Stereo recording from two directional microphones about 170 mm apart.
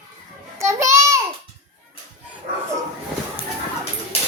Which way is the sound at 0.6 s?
15° right (ahead or behind).